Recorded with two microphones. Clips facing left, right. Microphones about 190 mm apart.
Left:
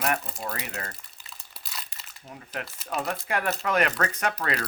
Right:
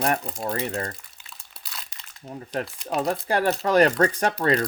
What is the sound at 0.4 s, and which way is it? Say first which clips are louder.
Speech: right 7 dB; 30° right (ahead or behind).